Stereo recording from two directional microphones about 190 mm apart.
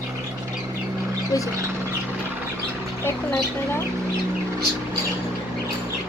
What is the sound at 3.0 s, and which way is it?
Speech, 15° left (ahead or behind).